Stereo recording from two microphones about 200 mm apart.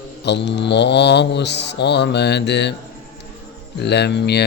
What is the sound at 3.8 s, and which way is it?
Speech, 55° left (ahead or behind).